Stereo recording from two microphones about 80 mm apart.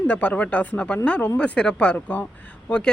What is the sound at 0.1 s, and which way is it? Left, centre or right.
Speech, centre.